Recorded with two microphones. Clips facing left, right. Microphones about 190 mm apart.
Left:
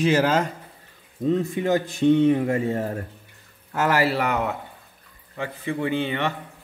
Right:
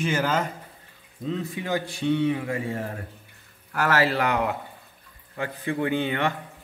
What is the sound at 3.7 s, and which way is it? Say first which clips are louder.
Speech: left 2 dB; 15° left (ahead or behind).